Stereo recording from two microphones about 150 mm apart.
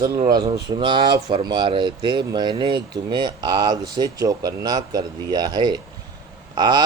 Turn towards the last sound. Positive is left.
turn(degrees=-30)  # may be behind; listen again after turning